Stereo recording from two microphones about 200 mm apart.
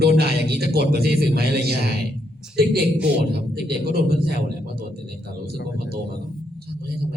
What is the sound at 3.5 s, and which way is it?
Speech, 50° right (ahead or behind).